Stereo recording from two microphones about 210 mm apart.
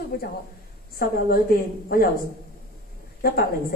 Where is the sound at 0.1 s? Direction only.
45° left (ahead or behind).